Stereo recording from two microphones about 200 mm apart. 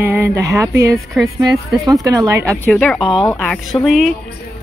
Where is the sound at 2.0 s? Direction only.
15° right (ahead or behind).